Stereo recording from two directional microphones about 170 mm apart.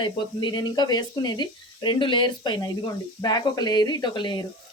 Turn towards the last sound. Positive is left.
turn(degrees=25)  # may be behind; listen again after turning